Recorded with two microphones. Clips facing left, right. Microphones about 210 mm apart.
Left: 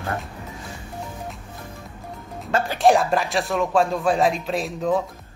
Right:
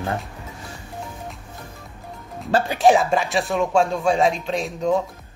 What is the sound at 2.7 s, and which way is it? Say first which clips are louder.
Speech: even; centre (ahead or behind).